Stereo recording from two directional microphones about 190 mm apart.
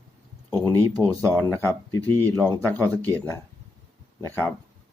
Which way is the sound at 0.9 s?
20° right (ahead or behind).